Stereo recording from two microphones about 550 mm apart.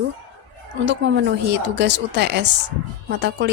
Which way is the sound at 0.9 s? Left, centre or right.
Centre.